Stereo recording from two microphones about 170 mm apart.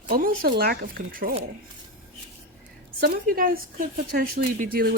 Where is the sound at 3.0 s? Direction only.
60° right (ahead or behind).